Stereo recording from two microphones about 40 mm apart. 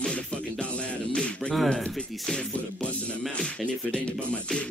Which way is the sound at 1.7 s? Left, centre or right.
Centre.